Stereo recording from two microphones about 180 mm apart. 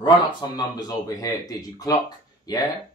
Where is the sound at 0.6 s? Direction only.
20° left (ahead or behind).